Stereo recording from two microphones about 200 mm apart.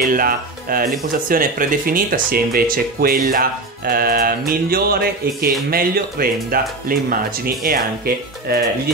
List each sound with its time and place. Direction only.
0.0 s speech: 45° right (ahead or behind)